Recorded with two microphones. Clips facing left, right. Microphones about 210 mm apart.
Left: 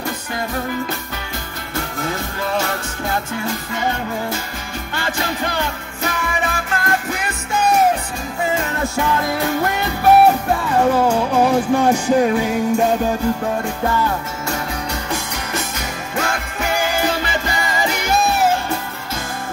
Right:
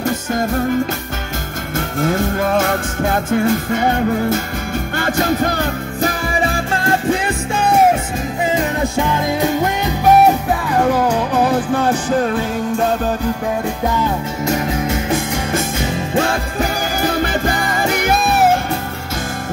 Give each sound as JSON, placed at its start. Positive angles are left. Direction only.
{"t": 2.0, "sound": "music", "side_deg": -50}
{"t": 8.9, "sound": "music", "side_deg": -20}
{"t": 11.1, "sound": "music", "side_deg": 10}
{"t": 13.8, "sound": "music", "side_deg": -15}
{"t": 16.2, "sound": "music", "side_deg": -35}